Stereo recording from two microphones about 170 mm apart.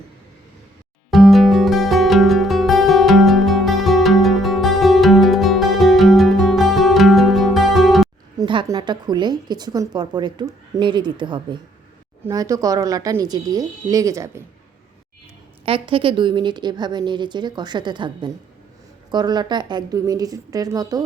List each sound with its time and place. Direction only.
1.1 s music: centre (ahead or behind)
8.4 s speech: 25° right (ahead or behind)
15.6 s speech: 30° right (ahead or behind)